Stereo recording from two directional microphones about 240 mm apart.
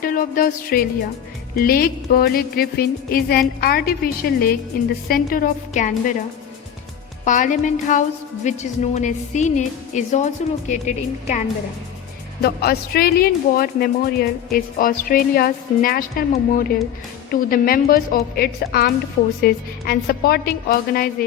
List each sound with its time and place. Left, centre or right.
0.0 s music: left
1.5 s speech: left
7.3 s speech: left
12.4 s speech: left